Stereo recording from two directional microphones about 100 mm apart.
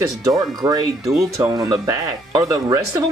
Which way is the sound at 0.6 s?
35° right (ahead or behind).